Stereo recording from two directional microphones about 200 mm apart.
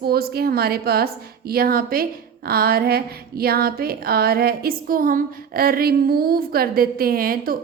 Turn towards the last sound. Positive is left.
turn(degrees=-45)  # may be behind; listen again after turning